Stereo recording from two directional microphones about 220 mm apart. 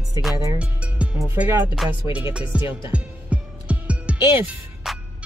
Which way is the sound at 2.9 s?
5° right (ahead or behind).